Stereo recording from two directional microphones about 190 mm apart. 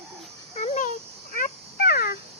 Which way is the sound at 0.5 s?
35° left (ahead or behind).